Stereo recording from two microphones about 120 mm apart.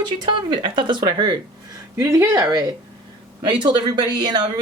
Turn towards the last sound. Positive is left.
turn(degrees=-35)  # may be behind; listen again after turning